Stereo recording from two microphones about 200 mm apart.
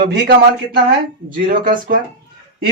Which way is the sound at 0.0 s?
55° right (ahead or behind).